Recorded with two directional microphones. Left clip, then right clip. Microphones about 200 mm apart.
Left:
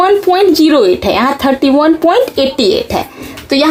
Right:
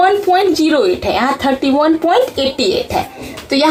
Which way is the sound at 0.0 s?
45° left (ahead or behind).